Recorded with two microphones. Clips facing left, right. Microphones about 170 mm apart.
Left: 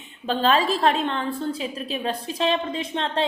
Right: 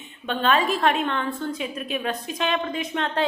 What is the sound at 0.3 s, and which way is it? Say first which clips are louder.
A woman's voice: left 1 dB; 30° left (ahead or behind).